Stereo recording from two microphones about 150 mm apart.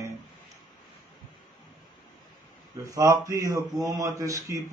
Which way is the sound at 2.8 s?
20° right (ahead or behind).